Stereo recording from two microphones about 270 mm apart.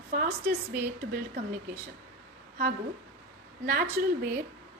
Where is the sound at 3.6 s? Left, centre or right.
Right.